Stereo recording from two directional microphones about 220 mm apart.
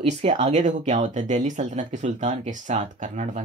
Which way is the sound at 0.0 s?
30° right (ahead or behind).